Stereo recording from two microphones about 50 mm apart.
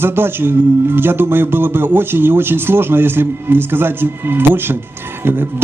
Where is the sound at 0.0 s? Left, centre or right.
Right.